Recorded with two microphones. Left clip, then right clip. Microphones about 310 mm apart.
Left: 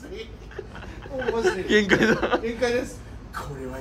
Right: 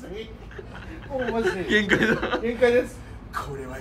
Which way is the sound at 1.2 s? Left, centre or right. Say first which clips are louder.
Left 1 dB; centre.